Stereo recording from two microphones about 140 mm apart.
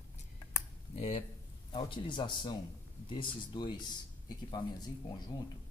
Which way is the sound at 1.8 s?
35° left (ahead or behind).